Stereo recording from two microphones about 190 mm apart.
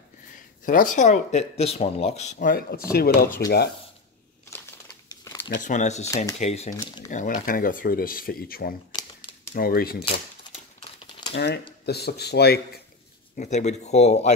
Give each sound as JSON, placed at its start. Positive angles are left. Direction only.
{"t": 0.7, "sound": "speech", "side_deg": 40}
{"t": 2.3, "sound": "speech", "side_deg": 50}
{"t": 5.1, "sound": "crumpling", "side_deg": 15}
{"t": 5.6, "sound": "speech", "side_deg": 40}
{"t": 10.8, "sound": "typewriter", "side_deg": 25}
{"t": 11.3, "sound": "speech", "side_deg": 60}
{"t": 13.4, "sound": "speech", "side_deg": 35}